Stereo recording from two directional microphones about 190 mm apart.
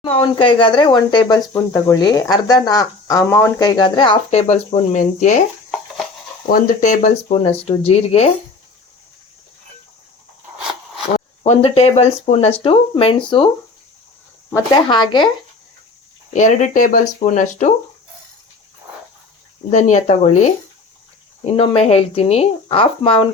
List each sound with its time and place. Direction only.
0.0 s speech: 25° left (ahead or behind)
6.5 s speech: 45° left (ahead or behind)
11.4 s speech: 35° left (ahead or behind)
14.5 s speech: 20° left (ahead or behind)
16.3 s speech: 40° left (ahead or behind)
19.7 s speech: 40° left (ahead or behind)
21.5 s speech: 30° left (ahead or behind)